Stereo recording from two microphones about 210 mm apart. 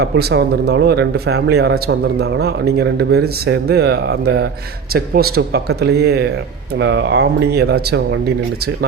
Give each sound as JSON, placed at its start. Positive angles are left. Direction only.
{"t": 0.0, "sound": "speech", "side_deg": -50}